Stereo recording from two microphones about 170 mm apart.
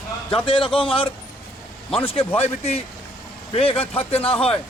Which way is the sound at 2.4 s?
40° left (ahead or behind).